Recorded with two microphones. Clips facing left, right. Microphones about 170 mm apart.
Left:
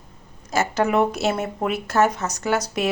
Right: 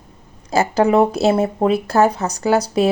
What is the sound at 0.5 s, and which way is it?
Speech, 35° right (ahead or behind).